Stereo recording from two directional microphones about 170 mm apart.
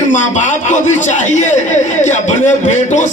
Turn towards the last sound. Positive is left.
turn(degrees=45)  # may be behind; listen again after turning